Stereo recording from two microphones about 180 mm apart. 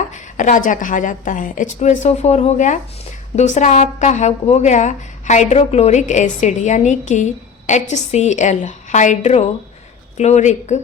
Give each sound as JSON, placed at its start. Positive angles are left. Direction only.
{"t": 0.1, "sound": "a woman's voice", "side_deg": 45}